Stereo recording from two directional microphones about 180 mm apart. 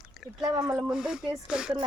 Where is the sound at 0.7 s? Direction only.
5° right (ahead or behind).